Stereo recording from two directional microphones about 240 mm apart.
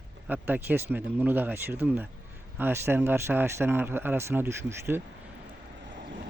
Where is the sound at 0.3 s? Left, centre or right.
Centre.